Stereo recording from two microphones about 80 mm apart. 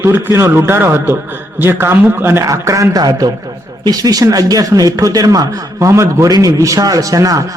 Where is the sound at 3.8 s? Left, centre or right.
Right.